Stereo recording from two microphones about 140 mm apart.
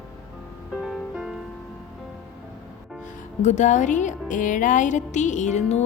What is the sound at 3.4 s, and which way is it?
Speech, 60° left (ahead or behind).